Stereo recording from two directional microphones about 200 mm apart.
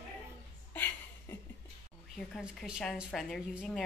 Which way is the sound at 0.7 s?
10° left (ahead or behind).